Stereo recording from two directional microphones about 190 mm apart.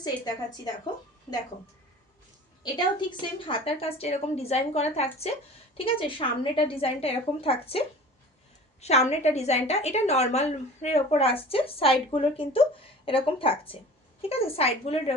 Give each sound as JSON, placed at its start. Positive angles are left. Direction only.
{"t": 0.0, "sound": "a woman's voice", "side_deg": 20}
{"t": 3.4, "sound": "a woman's voice", "side_deg": 30}